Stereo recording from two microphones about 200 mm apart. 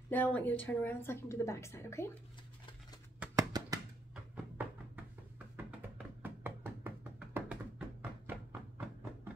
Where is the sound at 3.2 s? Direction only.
15° right (ahead or behind).